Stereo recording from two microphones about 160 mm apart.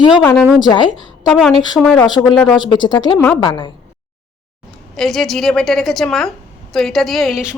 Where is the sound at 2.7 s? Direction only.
30° left (ahead or behind).